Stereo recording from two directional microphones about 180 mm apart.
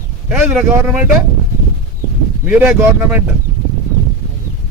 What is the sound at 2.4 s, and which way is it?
Speech, 10° right (ahead or behind).